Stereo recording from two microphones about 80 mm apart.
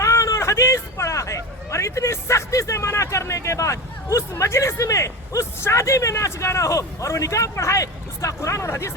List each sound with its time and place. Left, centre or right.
0.0 s speech: left